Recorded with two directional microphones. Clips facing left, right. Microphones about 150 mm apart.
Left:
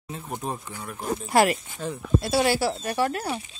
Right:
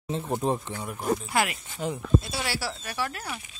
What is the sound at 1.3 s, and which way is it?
Speech, 40° left (ahead or behind).